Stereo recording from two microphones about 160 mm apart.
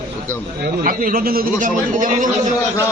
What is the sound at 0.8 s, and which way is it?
A man's voice, 60° right (ahead or behind).